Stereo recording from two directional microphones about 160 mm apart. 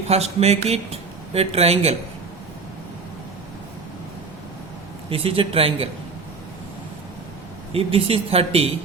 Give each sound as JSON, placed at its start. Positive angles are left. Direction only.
{"t": 0.1, "sound": "speech", "side_deg": -40}
{"t": 5.0, "sound": "speech", "side_deg": -35}
{"t": 7.7, "sound": "speech", "side_deg": -35}